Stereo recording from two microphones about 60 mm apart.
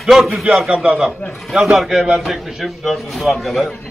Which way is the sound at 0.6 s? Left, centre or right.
Centre.